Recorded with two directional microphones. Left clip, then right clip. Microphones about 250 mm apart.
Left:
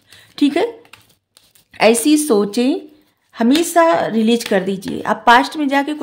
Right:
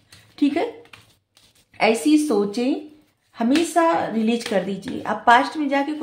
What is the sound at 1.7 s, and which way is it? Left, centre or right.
Speech, left.